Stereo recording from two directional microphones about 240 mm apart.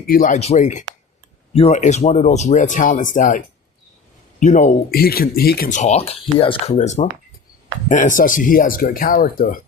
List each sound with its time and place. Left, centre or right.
0.0 s speech: left